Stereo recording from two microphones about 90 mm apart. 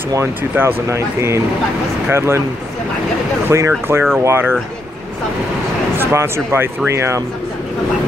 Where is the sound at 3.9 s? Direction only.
30° right (ahead or behind).